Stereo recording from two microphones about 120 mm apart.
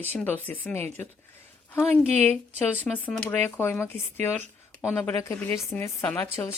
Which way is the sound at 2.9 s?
10° left (ahead or behind).